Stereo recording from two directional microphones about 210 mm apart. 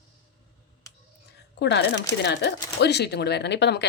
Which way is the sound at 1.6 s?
55° left (ahead or behind).